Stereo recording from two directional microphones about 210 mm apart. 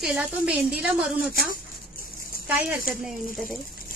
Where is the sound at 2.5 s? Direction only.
5° right (ahead or behind).